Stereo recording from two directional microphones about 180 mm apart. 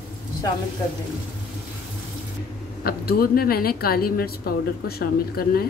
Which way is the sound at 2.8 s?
60° left (ahead or behind).